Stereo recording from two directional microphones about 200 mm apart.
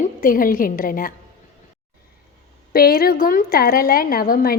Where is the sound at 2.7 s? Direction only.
50° left (ahead or behind).